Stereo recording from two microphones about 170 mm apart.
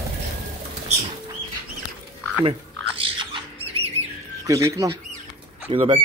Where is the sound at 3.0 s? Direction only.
35° right (ahead or behind).